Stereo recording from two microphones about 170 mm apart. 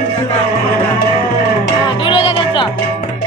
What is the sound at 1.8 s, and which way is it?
Music, 30° left (ahead or behind).